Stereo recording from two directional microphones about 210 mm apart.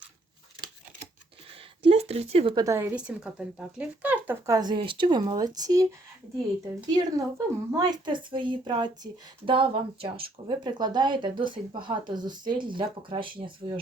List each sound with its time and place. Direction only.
1.8 s speech: 30° right (ahead or behind)
2.6 s speech: 15° right (ahead or behind)
6.9 s speech: 15° right (ahead or behind)